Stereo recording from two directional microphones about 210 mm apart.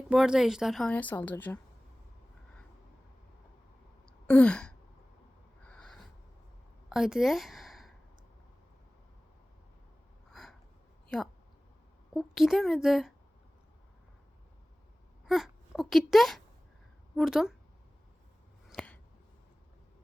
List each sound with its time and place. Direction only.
0.1 s speech: centre (ahead or behind)
4.0 s a sound: 5° left (ahead or behind)
6.9 s a woman's voice: centre (ahead or behind)
12.1 s speech: centre (ahead or behind)
15.3 s speech: centre (ahead or behind)
18.7 s a sound: 5° left (ahead or behind)